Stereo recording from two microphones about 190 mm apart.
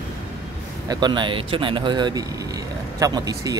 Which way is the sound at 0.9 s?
25° right (ahead or behind).